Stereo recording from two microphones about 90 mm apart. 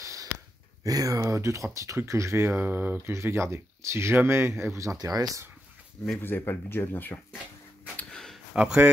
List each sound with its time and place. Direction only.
0.0 s sigh: 35° right (ahead or behind)
0.8 s speech: 40° right (ahead or behind)
4.9 s speech: 45° right (ahead or behind)
6.1 s speech: 25° left (ahead or behind)
7.9 s a sound: 10° left (ahead or behind)
8.5 s speech: 10° right (ahead or behind)